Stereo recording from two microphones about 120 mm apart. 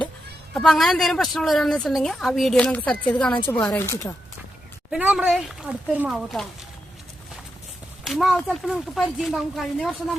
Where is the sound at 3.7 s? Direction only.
20° left (ahead or behind).